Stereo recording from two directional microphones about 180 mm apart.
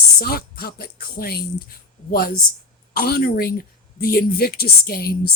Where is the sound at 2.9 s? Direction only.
55° left (ahead or behind).